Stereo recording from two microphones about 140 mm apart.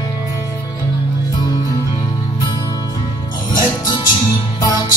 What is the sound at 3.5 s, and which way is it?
Music, 30° left (ahead or behind).